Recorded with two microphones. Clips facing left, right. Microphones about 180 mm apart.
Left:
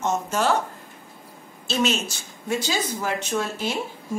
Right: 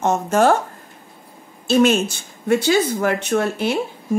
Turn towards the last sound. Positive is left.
turn(degrees=-60)  # may be behind; listen again after turning